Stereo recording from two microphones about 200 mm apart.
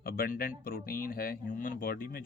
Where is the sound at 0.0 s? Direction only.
50° left (ahead or behind).